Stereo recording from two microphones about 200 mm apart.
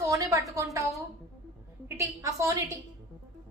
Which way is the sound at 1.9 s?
15° right (ahead or behind).